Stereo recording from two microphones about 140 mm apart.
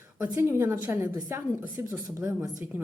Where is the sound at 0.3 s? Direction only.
15° right (ahead or behind).